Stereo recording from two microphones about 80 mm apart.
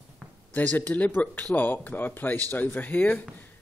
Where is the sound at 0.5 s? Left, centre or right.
Left.